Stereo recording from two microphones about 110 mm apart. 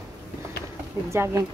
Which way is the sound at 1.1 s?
25° right (ahead or behind).